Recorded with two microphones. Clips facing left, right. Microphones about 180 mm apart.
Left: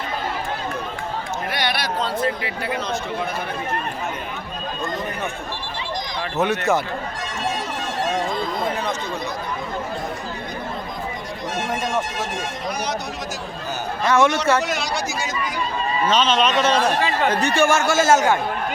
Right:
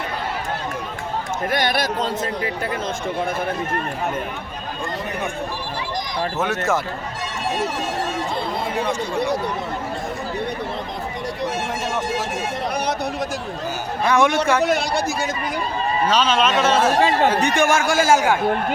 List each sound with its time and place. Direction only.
1.5 s speech: 45° right (ahead or behind)
6.4 s speech: centre (ahead or behind)
14.0 s speech: 15° right (ahead or behind)
14.6 s speech: 55° right (ahead or behind)
16.0 s speech: 5° right (ahead or behind)
17.0 s speech: 30° right (ahead or behind)
17.2 s speech: 10° right (ahead or behind)